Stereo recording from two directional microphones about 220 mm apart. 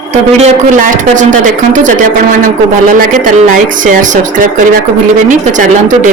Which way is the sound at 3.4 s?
35° right (ahead or behind).